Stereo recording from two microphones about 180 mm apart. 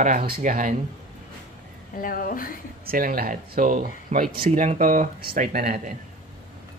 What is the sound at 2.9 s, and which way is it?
Speech, 55° right (ahead or behind).